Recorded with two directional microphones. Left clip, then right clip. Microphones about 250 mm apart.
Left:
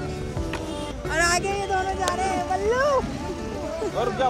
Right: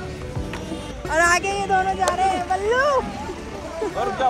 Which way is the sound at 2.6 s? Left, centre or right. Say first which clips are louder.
Right 2 dB; right.